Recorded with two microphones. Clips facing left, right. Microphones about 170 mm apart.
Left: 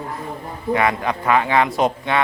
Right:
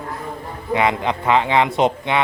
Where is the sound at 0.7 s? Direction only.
20° right (ahead or behind).